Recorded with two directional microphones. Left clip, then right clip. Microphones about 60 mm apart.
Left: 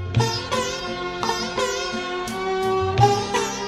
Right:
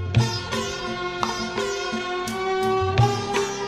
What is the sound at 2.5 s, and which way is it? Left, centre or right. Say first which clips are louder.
Music: even; left.